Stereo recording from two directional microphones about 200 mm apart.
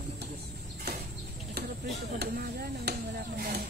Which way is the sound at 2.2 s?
50° right (ahead or behind).